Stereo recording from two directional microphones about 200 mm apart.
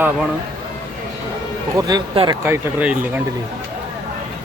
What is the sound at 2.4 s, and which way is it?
Speech, 10° right (ahead or behind).